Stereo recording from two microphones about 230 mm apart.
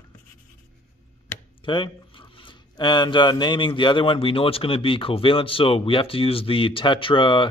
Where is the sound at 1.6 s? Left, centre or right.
Left.